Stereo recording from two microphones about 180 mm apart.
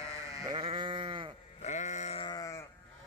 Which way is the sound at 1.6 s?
40° left (ahead or behind).